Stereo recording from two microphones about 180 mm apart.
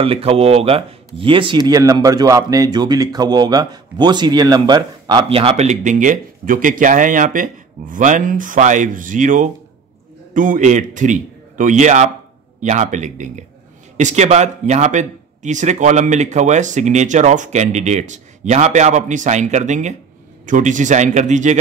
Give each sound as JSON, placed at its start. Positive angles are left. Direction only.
{"t": 0.0, "sound": "a man's voice", "side_deg": -30}